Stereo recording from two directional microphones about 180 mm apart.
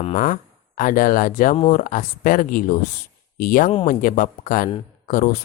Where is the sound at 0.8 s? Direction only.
50° left (ahead or behind).